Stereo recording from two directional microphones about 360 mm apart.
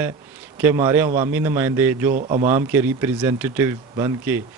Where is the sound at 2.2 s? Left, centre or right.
Centre.